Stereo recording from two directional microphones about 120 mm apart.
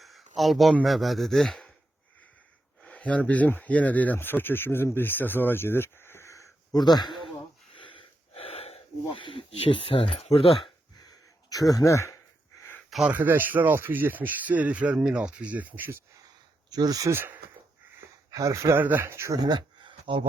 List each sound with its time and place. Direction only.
0.3 s speech: centre (ahead or behind)
2.8 s speech: 10° left (ahead or behind); by 6.5 s 25° left (ahead or behind)
6.7 s speech: 35° left (ahead or behind)
7.8 s wheeze: 45° left (ahead or behind)
9.2 s speech: 50° left (ahead or behind)
11.5 s speech: 30° left (ahead or behind)
12.9 s speech: 10° right (ahead or behind)
16.6 s speech: 35° right (ahead or behind)
17.2 s speech: 20° right (ahead or behind)
19.4 s speech: 35° right (ahead or behind)